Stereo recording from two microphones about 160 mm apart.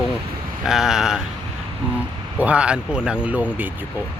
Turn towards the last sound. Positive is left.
turn(degrees=-10)  # may be behind; listen again after turning